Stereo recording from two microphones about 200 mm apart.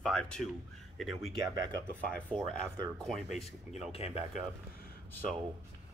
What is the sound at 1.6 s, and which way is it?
Speech, 20° right (ahead or behind).